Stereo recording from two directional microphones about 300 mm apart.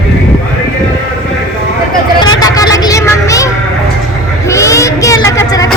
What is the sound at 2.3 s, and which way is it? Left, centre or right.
Vehicle, centre.